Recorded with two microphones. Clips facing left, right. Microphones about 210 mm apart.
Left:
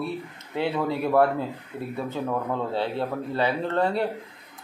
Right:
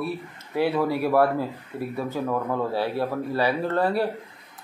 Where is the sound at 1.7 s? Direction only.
30° right (ahead or behind).